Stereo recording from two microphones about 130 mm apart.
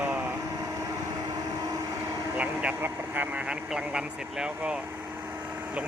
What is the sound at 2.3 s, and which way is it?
Speech, 10° right (ahead or behind).